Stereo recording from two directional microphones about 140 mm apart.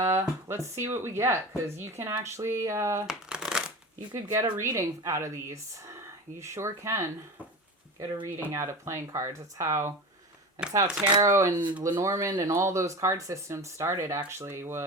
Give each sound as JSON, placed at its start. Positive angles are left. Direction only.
{"t": 0.0, "sound": "speech", "side_deg": -20}
{"t": 3.1, "sound": "shuffling cards", "side_deg": -5}
{"t": 4.1, "sound": "speech", "side_deg": -20}
{"t": 10.8, "sound": "speech", "side_deg": -10}
{"t": 11.1, "sound": "speech", "side_deg": -25}